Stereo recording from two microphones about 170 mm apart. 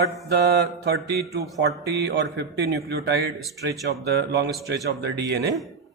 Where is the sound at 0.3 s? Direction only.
75° right (ahead or behind).